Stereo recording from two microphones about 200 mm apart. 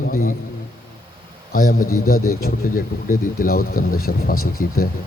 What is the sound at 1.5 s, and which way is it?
Speech, 45° left (ahead or behind).